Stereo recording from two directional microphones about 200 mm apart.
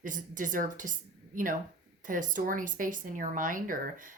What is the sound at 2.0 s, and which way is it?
Speech, 40° right (ahead or behind).